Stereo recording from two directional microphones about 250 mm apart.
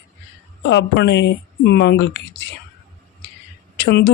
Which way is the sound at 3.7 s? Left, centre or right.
Left.